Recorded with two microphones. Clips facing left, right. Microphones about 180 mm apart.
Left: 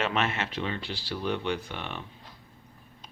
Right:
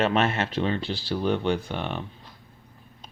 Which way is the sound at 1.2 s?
40° right (ahead or behind).